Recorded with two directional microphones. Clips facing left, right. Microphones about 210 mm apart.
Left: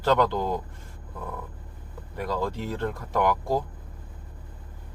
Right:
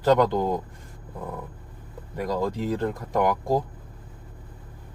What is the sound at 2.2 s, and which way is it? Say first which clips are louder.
Speech: right 2 dB; 15° right (ahead or behind).